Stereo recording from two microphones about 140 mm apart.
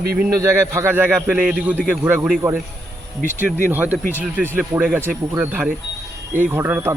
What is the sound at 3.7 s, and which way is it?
Speech, 10° right (ahead or behind).